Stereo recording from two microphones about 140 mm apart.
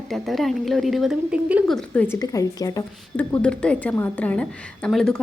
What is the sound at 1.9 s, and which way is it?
Speech, 15° left (ahead or behind).